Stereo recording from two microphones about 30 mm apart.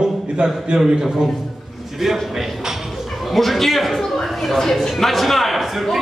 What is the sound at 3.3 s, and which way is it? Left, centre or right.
A man's voice, centre.